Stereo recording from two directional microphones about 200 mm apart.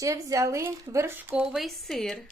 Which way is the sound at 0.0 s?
15° right (ahead or behind).